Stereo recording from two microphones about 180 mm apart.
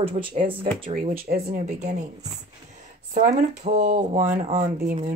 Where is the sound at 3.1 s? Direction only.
40° right (ahead or behind).